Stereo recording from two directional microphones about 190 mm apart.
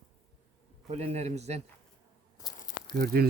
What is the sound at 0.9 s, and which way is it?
Speech, 35° right (ahead or behind).